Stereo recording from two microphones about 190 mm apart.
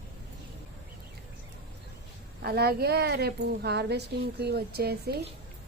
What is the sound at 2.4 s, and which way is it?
A woman's voice, 55° right (ahead or behind).